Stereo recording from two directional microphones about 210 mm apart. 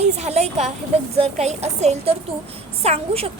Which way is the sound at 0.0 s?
30° right (ahead or behind).